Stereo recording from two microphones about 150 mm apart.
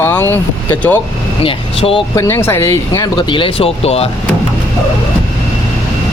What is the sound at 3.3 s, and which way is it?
Speech, 35° left (ahead or behind).